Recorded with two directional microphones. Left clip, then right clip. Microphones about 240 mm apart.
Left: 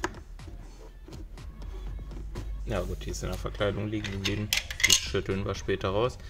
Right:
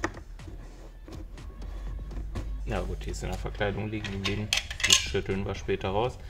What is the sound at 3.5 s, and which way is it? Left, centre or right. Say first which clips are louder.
Cutlery: left 1 dB; left.